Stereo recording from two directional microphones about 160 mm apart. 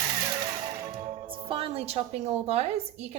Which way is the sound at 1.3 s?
35° right (ahead or behind).